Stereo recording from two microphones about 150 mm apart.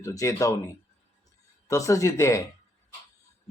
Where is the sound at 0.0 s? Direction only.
20° left (ahead or behind).